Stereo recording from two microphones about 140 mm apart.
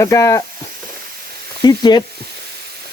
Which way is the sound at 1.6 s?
30° left (ahead or behind).